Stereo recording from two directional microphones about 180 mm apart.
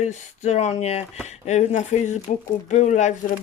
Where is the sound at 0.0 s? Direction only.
40° left (ahead or behind).